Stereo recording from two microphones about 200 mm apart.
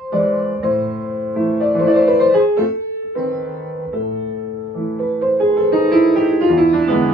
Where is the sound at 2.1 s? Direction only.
50° left (ahead or behind).